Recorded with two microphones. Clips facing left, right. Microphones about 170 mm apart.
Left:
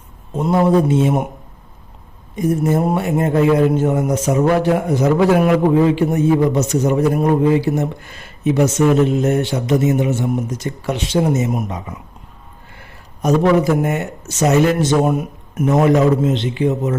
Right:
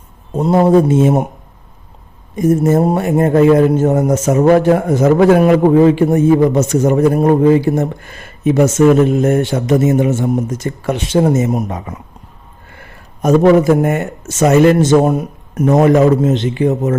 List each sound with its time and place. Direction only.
0.3 s speech: 35° right (ahead or behind)
2.3 s a man's voice: 45° right (ahead or behind)
13.2 s a man's voice: 50° right (ahead or behind)